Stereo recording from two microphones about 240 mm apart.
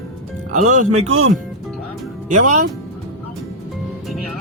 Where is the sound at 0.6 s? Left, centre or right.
Right.